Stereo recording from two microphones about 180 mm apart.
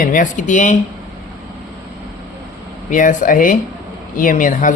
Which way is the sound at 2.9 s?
50° left (ahead or behind).